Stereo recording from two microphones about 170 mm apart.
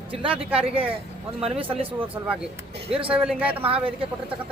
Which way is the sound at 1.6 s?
30° right (ahead or behind).